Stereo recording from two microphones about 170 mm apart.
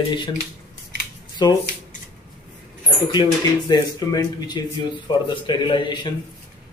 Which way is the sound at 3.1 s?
25° left (ahead or behind).